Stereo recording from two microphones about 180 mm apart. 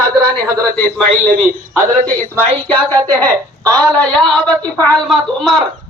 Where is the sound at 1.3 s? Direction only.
50° right (ahead or behind).